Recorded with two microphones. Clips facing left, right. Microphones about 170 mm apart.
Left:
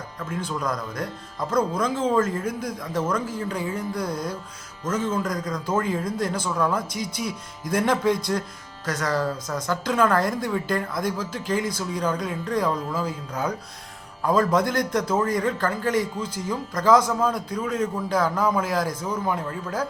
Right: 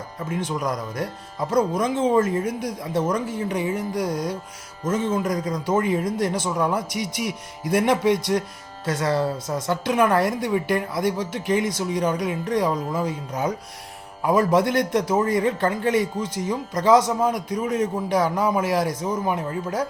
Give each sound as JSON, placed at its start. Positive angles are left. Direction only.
{"t": 0.2, "sound": "a man's voice", "side_deg": -20}
{"t": 6.9, "sound": "speech", "side_deg": -90}
{"t": 7.2, "sound": "a man's voice", "side_deg": -20}